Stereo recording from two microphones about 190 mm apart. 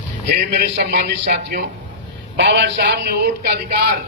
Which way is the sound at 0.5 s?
60° right (ahead or behind).